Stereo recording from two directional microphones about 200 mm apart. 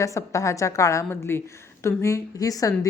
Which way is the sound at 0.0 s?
15° left (ahead or behind).